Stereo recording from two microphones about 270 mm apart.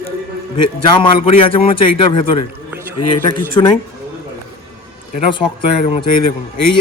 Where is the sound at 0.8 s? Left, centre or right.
Centre.